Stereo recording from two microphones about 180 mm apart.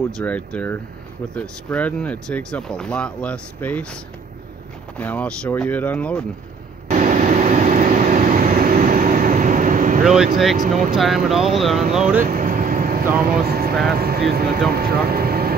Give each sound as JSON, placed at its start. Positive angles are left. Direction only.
{"t": 0.2, "sound": "speech", "side_deg": 5}
{"t": 6.9, "sound": "vehicle", "side_deg": -45}
{"t": 10.0, "sound": "speech", "side_deg": -5}
{"t": 10.6, "sound": "speech", "side_deg": -50}
{"t": 11.0, "sound": "speech", "side_deg": 0}
{"t": 12.3, "sound": "vehicle", "side_deg": -50}
{"t": 13.2, "sound": "speech", "side_deg": -60}